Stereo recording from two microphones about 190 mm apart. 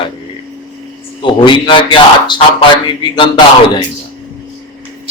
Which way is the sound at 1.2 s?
25° left (ahead or behind).